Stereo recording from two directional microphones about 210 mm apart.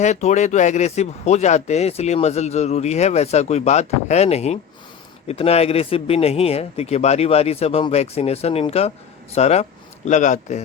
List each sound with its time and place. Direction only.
0.0 s speech: 35° left (ahead or behind)